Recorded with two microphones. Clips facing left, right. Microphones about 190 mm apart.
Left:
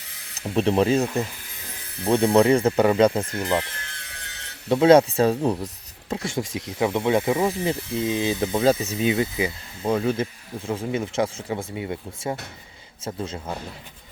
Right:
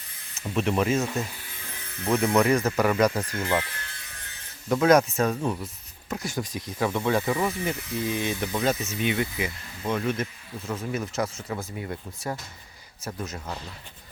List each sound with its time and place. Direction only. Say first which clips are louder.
0.0 s a sound: left 3 dB; 80° left
0.5 s speech: left 5 dB; 30° left (ahead or behind)
3.9 s music: left 3 dB; 80° left
4.7 s speech: left 5 dB; 25° left (ahead or behind)